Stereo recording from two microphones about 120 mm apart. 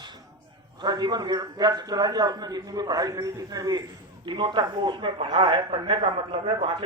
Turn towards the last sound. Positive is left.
turn(degrees=-45)  # may be behind; listen again after turning